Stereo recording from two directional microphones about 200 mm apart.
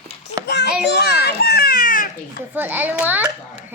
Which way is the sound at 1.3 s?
50° left (ahead or behind).